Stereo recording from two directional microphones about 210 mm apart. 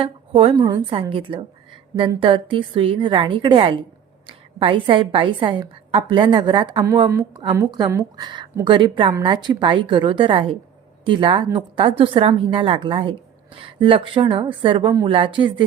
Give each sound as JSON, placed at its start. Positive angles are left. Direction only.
{"t": 0.0, "sound": "speech", "side_deg": -25}